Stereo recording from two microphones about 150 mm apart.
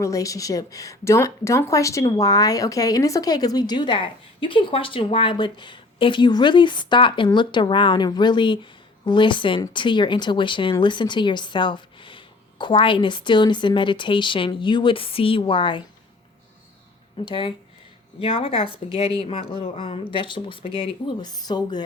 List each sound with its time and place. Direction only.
0.0 s speech: 20° left (ahead or behind)
17.2 s speech: 35° left (ahead or behind)